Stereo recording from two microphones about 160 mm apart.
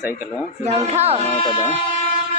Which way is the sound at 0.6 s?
45° right (ahead or behind).